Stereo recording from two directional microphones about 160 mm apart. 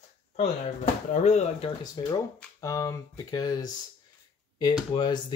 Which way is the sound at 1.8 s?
25° left (ahead or behind).